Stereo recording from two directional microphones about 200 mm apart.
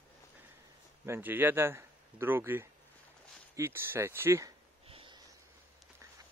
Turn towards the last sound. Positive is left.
turn(degrees=-25)  # may be behind; listen again after turning